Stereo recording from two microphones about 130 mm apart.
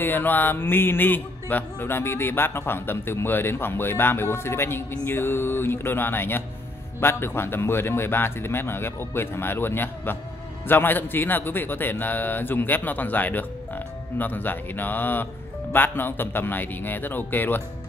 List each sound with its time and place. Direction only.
0.0 s music: 15° left (ahead or behind)